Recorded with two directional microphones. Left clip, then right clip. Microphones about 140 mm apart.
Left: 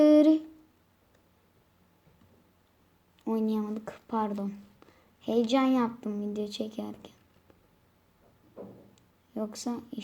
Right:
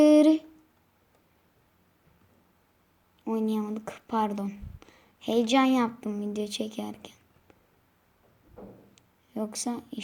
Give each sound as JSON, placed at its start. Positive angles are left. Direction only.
{"t": 0.0, "sound": "humming", "side_deg": -25}
{"t": 3.2, "sound": "speech", "side_deg": -15}
{"t": 9.0, "sound": "a sound", "side_deg": -25}